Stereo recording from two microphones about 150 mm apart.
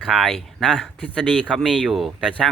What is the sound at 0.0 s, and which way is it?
Speech, centre (ahead or behind).